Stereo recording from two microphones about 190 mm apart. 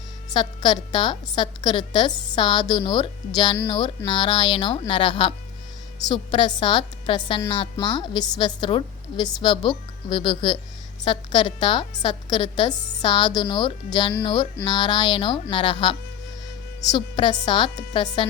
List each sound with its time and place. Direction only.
0.3 s a woman's voice: 25° left (ahead or behind)